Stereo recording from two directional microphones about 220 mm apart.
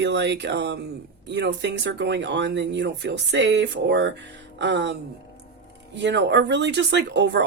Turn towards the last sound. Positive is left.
turn(degrees=-50)  # may be behind; listen again after turning